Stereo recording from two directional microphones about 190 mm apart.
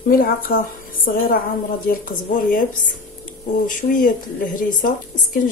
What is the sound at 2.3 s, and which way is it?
Speech, 40° left (ahead or behind).